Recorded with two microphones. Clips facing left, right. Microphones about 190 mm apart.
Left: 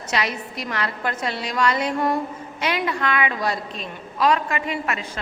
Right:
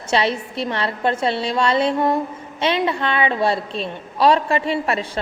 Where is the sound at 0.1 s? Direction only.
30° right (ahead or behind).